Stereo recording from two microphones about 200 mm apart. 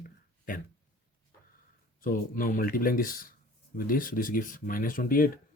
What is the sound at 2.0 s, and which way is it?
Speech, 45° left (ahead or behind).